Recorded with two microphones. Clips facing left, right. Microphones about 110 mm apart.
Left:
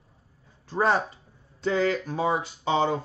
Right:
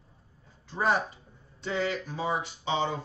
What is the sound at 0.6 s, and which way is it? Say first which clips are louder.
Speech: left 4 dB; 40° left (ahead or behind).